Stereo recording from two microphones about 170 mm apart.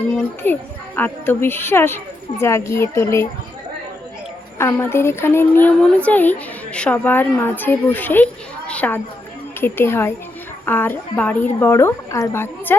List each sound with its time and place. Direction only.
0.9 s a woman's voice: 10° left (ahead or behind)
4.5 s a woman's voice: 15° left (ahead or behind)